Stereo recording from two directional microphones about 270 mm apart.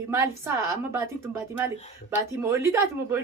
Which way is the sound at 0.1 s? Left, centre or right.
Centre.